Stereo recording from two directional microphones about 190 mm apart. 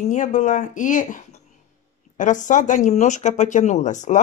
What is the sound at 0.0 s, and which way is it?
Speech, 40° left (ahead or behind).